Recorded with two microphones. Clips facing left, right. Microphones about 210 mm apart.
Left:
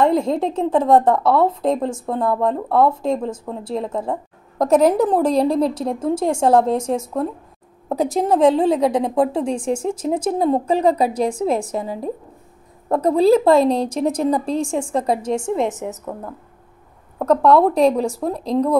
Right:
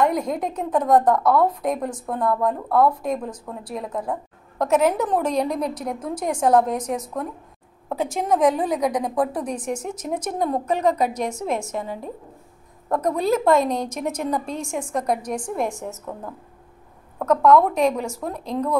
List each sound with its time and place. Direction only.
0.0 s a woman's voice: 25° left (ahead or behind)
17.2 s a woman's voice: 30° left (ahead or behind)